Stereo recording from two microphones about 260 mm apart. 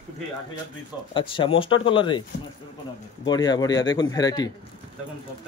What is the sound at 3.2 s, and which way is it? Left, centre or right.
Speech, centre.